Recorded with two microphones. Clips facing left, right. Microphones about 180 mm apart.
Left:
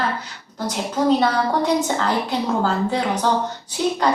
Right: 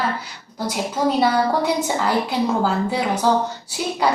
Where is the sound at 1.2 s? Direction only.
10° right (ahead or behind).